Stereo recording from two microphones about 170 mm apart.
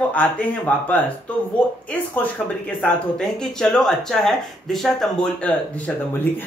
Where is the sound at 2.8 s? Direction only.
5° left (ahead or behind).